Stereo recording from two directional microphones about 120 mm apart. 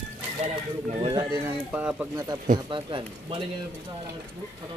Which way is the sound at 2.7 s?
45° right (ahead or behind).